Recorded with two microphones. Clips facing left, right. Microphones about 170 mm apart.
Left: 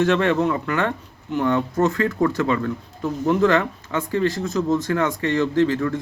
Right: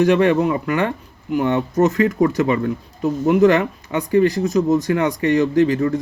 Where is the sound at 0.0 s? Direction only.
15° right (ahead or behind).